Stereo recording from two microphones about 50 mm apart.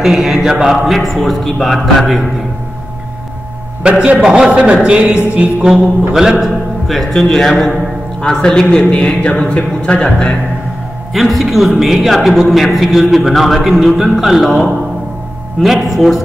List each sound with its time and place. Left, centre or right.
0.0 s mantra: centre
0.8 s a man's voice: centre
3.8 s a man's voice: centre
4.2 s music: centre
6.1 s a man's voice: centre
11.1 s a man's voice: centre